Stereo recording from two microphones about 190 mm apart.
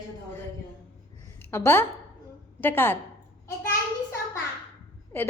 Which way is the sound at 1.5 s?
10° left (ahead or behind).